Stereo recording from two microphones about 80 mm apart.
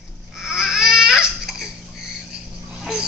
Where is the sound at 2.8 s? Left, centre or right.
Centre.